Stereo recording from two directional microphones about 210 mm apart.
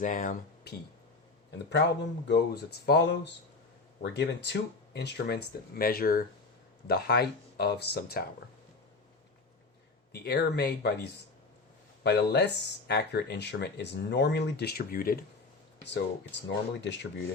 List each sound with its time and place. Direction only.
0.0 s speech: 40° left (ahead or behind)
1.5 s speech: 55° left (ahead or behind)
10.1 s speech: 50° left (ahead or behind)